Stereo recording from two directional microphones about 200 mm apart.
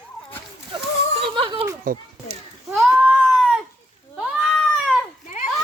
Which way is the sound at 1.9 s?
45° right (ahead or behind).